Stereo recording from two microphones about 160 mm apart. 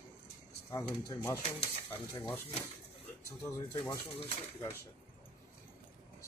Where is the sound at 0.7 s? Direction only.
15° left (ahead or behind).